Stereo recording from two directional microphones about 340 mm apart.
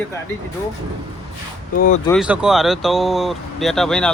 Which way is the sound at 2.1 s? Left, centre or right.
Centre.